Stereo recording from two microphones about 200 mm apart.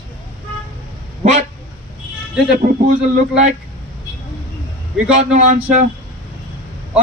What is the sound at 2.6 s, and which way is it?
Speech, 45° right (ahead or behind).